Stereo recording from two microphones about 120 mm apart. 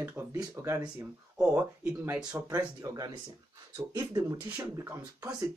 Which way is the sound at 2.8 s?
30° right (ahead or behind).